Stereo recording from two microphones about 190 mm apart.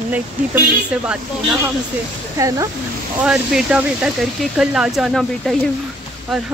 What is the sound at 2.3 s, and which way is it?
Speech, 15° right (ahead or behind).